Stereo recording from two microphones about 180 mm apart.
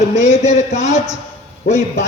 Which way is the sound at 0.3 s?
40° left (ahead or behind).